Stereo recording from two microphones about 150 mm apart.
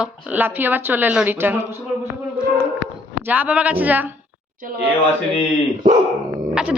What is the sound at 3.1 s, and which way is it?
Speech, 15° right (ahead or behind).